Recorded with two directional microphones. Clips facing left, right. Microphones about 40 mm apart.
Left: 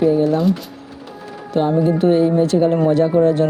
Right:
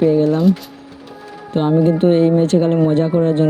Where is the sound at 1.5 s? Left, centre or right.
Right.